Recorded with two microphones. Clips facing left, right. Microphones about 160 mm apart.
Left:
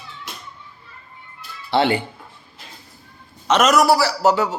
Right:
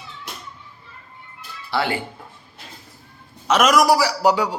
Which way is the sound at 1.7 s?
25° left (ahead or behind).